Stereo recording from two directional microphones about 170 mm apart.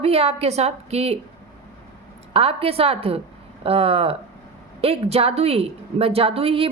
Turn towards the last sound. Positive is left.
turn(degrees=-35)  # may be behind; listen again after turning